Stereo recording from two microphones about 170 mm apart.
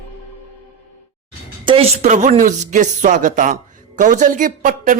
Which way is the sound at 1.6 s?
35° right (ahead or behind).